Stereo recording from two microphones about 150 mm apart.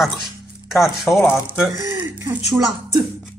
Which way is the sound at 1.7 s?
20° right (ahead or behind).